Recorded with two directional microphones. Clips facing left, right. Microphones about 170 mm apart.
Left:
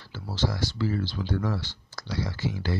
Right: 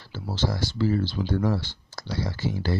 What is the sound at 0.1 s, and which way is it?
Speech, 25° right (ahead or behind).